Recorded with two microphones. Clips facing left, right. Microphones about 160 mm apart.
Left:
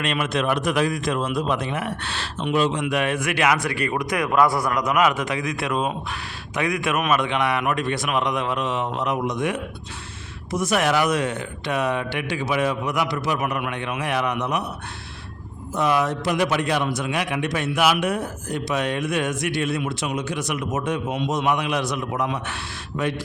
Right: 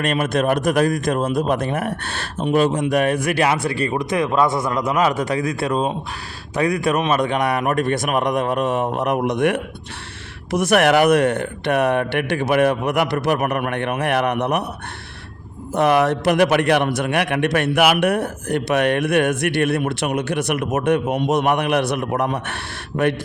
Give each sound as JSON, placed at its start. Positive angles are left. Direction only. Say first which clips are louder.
{"t": 0.0, "sound": "a man's voice", "louder": "right 4 dB", "side_deg": -45}
{"t": 15.7, "sound": "a man's voice", "louder": "right 5 dB", "side_deg": -65}